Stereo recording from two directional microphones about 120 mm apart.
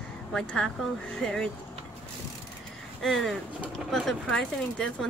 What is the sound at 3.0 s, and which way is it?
Speech, centre (ahead or behind).